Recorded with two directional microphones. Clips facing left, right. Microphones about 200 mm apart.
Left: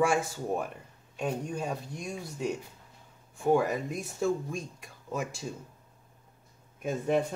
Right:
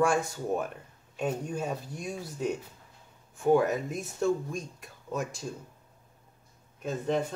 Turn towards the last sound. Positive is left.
turn(degrees=10)  # may be behind; listen again after turning